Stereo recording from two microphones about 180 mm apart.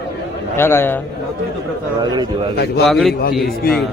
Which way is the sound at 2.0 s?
25° right (ahead or behind).